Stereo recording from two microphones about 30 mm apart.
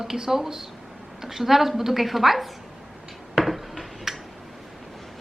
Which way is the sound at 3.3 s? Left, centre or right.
Centre.